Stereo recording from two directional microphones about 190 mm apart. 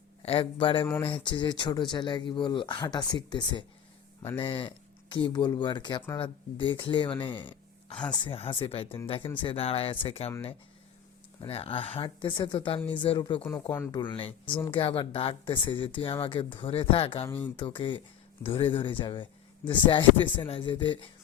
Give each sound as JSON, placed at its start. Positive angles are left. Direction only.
{"t": 0.2, "sound": "speech", "side_deg": 30}
{"t": 11.4, "sound": "speech", "side_deg": 30}
{"t": 14.0, "sound": "speech", "side_deg": 25}
{"t": 17.2, "sound": "speech", "side_deg": 10}
{"t": 17.6, "sound": "speech", "side_deg": 25}